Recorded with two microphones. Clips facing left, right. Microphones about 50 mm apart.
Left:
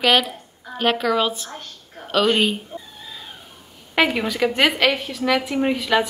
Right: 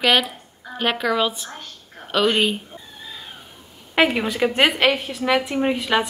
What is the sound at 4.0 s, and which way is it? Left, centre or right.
A woman's voice, centre.